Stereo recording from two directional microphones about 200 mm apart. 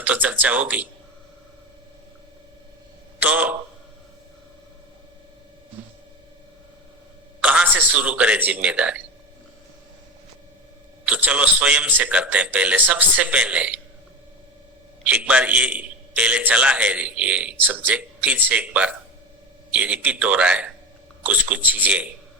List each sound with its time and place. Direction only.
0.0 s a man's voice: 10° right (ahead or behind)
3.2 s a man's voice: 10° right (ahead or behind)
7.4 s a man's voice: 10° right (ahead or behind)
11.0 s a man's voice: 5° right (ahead or behind)
15.0 s a man's voice: 5° right (ahead or behind)